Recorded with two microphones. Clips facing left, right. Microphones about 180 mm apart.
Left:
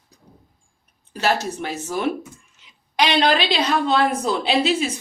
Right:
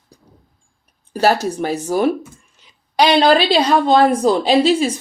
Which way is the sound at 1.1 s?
40° right (ahead or behind).